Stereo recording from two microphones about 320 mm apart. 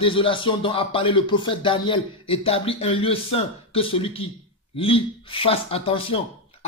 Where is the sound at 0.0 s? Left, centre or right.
Centre.